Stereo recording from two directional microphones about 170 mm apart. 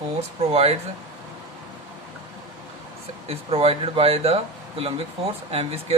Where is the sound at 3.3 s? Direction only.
35° right (ahead or behind).